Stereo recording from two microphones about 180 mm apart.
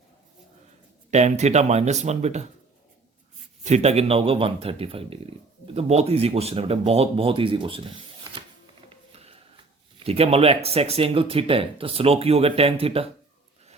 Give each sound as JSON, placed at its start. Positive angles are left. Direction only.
{"t": 1.1, "sound": "speech", "side_deg": -40}
{"t": 3.6, "sound": "speech", "side_deg": -40}
{"t": 9.1, "sound": "a sound", "side_deg": -35}
{"t": 10.0, "sound": "speech", "side_deg": -35}